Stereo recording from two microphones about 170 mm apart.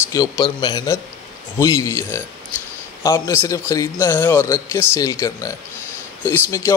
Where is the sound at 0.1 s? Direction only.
20° left (ahead or behind).